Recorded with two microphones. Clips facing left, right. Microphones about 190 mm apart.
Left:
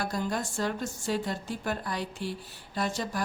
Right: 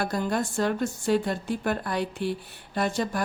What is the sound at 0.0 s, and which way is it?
Speech, 60° right (ahead or behind).